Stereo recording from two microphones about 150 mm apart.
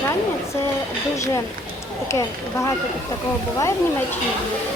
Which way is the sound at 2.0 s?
20° left (ahead or behind).